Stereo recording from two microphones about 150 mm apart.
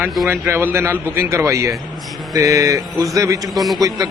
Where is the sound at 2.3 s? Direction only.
20° right (ahead or behind).